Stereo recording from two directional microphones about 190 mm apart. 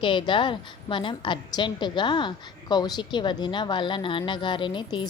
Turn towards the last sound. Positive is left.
turn(degrees=25)  # may be behind; listen again after turning